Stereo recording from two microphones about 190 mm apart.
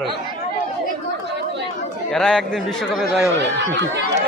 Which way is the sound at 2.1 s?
5° left (ahead or behind).